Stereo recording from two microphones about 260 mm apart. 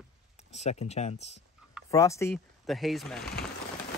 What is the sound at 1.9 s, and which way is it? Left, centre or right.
Speech, centre.